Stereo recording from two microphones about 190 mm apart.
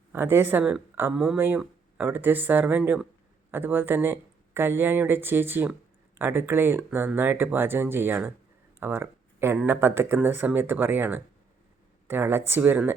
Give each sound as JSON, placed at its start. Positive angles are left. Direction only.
{"t": 0.1, "sound": "speech", "side_deg": -10}
{"t": 8.8, "sound": "a sound", "side_deg": -10}
{"t": 9.6, "sound": "speech", "side_deg": -10}